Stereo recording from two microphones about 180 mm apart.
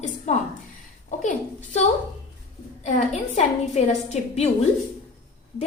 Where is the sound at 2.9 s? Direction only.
45° left (ahead or behind).